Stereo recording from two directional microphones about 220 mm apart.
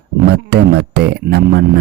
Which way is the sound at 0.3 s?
50° right (ahead or behind).